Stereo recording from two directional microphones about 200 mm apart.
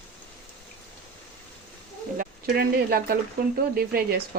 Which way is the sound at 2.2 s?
50° right (ahead or behind).